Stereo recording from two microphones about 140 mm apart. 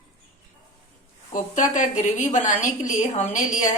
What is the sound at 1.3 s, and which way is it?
Speech, 60° left (ahead or behind).